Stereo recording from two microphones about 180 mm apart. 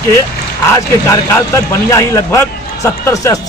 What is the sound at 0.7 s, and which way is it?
Speech, 15° left (ahead or behind).